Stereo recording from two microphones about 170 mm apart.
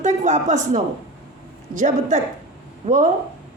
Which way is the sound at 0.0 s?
45° right (ahead or behind).